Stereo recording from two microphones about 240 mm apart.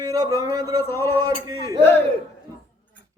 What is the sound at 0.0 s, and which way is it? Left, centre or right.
Speech, centre.